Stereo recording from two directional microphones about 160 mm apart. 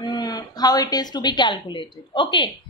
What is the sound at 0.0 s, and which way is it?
A woman's voice, 25° left (ahead or behind).